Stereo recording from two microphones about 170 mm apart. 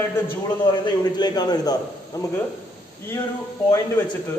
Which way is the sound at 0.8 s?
25° left (ahead or behind).